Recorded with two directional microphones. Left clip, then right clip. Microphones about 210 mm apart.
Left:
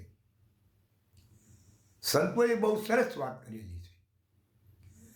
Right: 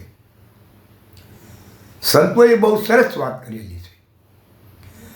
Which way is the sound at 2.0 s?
5° left (ahead or behind).